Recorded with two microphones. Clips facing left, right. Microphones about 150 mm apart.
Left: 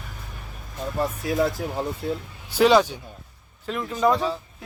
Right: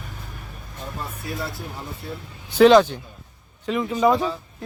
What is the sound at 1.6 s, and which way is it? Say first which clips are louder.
Speech: left 6 dB; 90° left.